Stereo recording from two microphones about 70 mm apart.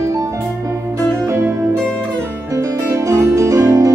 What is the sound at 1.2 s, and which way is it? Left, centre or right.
Music, right.